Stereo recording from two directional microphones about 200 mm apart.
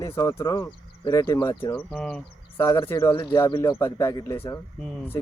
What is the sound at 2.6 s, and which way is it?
Speech, 20° left (ahead or behind).